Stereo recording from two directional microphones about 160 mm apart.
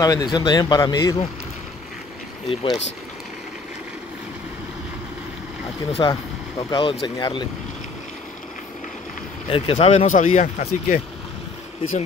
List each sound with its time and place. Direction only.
0.0 s speech: 25° left (ahead or behind)
2.4 s speech: 35° left (ahead or behind)
6.0 s speech: 25° left (ahead or behind)
9.5 s speech: 40° left (ahead or behind)